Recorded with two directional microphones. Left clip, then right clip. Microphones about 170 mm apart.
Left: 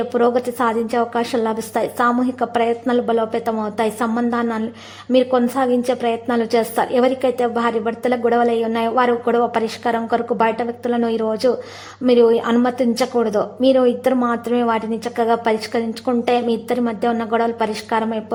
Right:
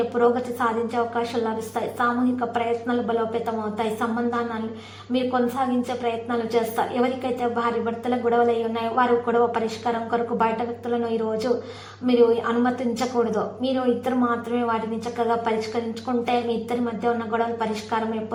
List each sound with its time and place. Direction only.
0.2 s a woman's voice: 35° left (ahead or behind)
5.1 s a woman's voice: 35° left (ahead or behind)